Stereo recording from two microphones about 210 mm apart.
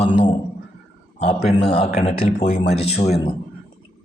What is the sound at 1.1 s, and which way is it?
Speech, 30° left (ahead or behind).